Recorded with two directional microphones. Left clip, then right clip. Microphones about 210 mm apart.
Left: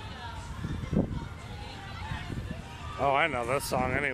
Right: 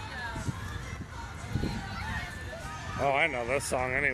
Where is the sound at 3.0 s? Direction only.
20° left (ahead or behind).